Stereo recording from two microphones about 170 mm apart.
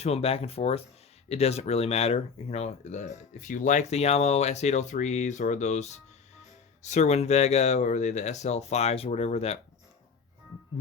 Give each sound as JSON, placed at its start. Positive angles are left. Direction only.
{"t": 0.0, "sound": "speech", "side_deg": 35}